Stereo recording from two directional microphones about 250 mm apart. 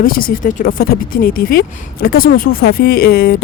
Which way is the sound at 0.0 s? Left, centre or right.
Left.